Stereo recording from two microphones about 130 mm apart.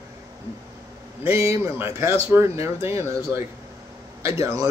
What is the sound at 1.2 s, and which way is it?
Speech, 20° right (ahead or behind).